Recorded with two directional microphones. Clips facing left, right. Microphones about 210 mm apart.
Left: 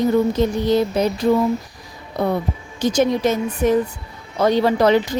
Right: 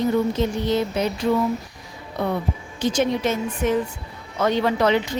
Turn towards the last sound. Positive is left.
turn(degrees=40)  # may be behind; listen again after turning